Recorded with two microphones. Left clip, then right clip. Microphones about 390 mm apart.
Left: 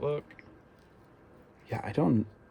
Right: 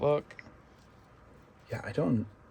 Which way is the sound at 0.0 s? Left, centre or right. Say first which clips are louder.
Right 5 dB; centre.